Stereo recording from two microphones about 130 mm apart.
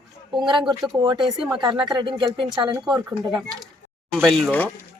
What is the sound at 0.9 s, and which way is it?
Speech, 35° right (ahead or behind).